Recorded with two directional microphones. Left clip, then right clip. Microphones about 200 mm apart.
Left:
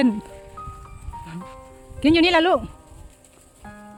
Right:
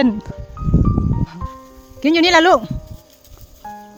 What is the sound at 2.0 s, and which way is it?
Speech, 10° right (ahead or behind).